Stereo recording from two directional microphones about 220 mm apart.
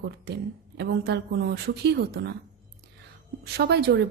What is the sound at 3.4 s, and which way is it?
Speech, 50° right (ahead or behind).